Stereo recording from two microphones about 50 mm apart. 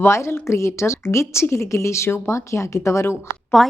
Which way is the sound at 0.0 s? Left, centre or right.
Left.